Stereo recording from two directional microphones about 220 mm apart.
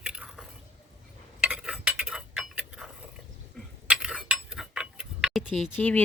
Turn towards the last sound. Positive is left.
turn(degrees=10)  # may be behind; listen again after turning